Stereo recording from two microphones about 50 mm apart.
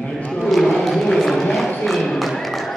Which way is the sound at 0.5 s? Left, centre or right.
Centre.